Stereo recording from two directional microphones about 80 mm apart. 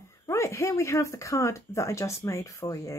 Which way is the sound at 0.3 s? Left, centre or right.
Left.